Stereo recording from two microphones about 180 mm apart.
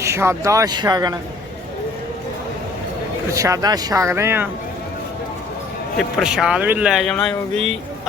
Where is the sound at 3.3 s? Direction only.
15° right (ahead or behind).